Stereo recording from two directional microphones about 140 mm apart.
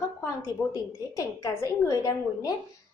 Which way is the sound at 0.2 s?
25° left (ahead or behind).